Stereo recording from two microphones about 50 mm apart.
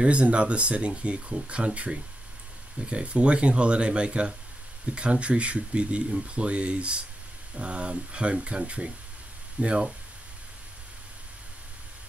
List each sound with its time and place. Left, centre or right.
0.0 s speech: right